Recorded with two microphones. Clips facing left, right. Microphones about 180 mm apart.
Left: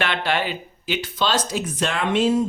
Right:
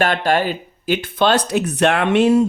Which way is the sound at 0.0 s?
45° right (ahead or behind).